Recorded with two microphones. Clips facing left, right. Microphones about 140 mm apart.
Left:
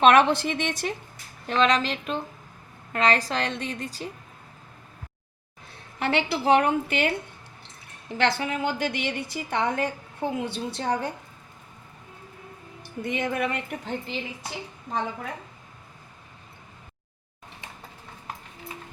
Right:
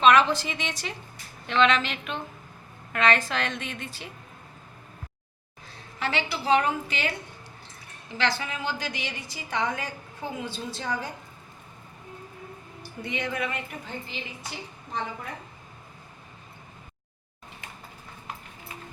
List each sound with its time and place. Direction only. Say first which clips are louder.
0.0 s a woman's voice: left 2 dB; 55° left (ahead or behind)
1.5 s a woman's voice: left 1 dB; 40° left (ahead or behind)
6.0 s a woman's voice: left 4 dB; 55° left (ahead or behind)
8.2 s a woman's voice: left 4 dB; 55° left (ahead or behind)
13.0 s a woman's voice: left 4 dB; 50° left (ahead or behind)